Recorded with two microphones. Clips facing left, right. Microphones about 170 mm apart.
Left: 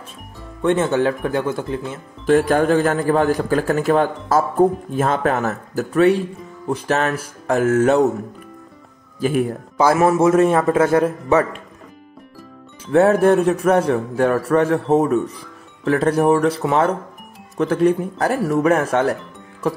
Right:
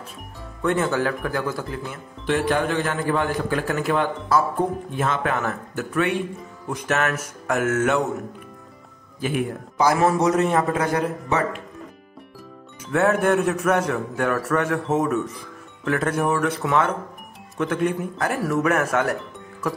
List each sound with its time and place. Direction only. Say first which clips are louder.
0.6 s speech: left 5 dB; 25° left (ahead or behind)
2.2 s a man's voice: left 7 dB; 45° left (ahead or behind)
9.2 s a man's voice: left 6 dB; 40° left (ahead or behind)
9.9 s speech: left 7 dB; 20° left (ahead or behind)
12.9 s a man's voice: left 6 dB; 35° left (ahead or behind)